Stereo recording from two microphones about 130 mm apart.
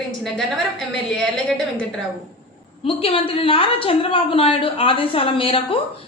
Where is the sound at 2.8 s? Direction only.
45° left (ahead or behind).